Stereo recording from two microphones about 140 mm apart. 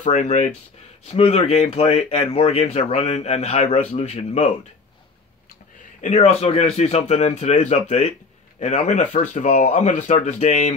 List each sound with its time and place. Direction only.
0.0 s speech: 55° left (ahead or behind)
5.9 s a man's voice: 55° left (ahead or behind)
6.4 s speech: 45° left (ahead or behind)